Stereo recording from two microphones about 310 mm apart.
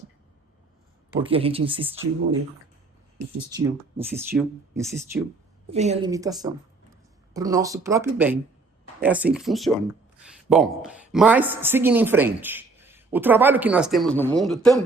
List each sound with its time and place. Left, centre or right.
1.2 s speech: centre
3.9 s speech: centre
5.7 s speech: right; by 14.8 s centre